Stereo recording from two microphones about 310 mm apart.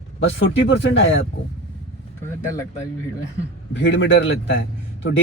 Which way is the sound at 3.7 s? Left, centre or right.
Left.